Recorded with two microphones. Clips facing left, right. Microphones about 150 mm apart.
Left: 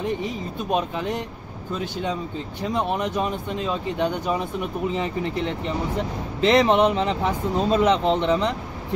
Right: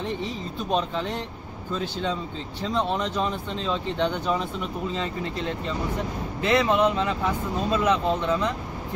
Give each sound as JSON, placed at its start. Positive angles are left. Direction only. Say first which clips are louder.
{"t": 0.2, "sound": "speech", "louder": "left 2 dB", "side_deg": 10}
{"t": 2.6, "sound": "speech", "louder": "left 1 dB", "side_deg": 15}